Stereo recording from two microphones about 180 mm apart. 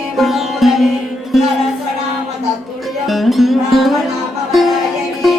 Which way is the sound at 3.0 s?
Centre (ahead or behind).